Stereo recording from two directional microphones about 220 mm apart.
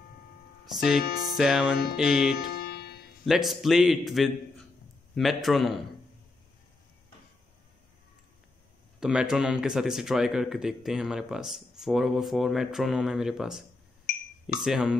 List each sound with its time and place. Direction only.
1.3 s speech: 5° right (ahead or behind)
2.3 s music: 45° left (ahead or behind)
3.3 s speech: centre (ahead or behind)
9.0 s speech: 5° right (ahead or behind)
14.1 s a sound: 45° left (ahead or behind)
14.6 s speech: 5° right (ahead or behind)